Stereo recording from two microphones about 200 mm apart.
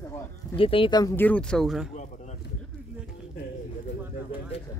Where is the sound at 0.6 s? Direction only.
25° left (ahead or behind); by 1.9 s centre (ahead or behind).